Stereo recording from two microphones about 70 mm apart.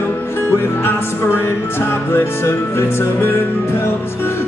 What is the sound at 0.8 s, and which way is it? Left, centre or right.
Music, left.